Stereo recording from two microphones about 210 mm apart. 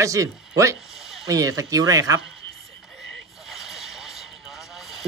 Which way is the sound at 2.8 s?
Centre (ahead or behind).